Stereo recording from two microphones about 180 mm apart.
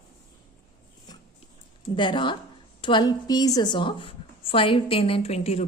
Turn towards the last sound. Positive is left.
turn(degrees=35)  # may be behind; listen again after turning